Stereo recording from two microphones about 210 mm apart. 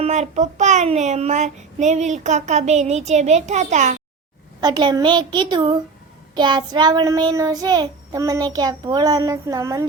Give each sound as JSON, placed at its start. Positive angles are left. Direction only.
{"t": 0.0, "sound": "a child's voice", "side_deg": -35}
{"t": 4.6, "sound": "child singing", "side_deg": -20}